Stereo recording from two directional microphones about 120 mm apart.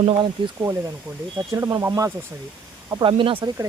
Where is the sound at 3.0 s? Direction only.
45° right (ahead or behind).